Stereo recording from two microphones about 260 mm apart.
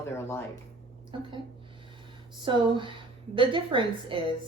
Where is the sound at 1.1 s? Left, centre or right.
Centre.